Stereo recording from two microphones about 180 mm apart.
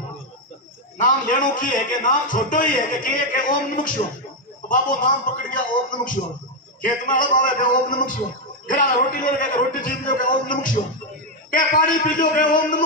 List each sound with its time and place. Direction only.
0.9 s a man's voice: 45° left (ahead or behind)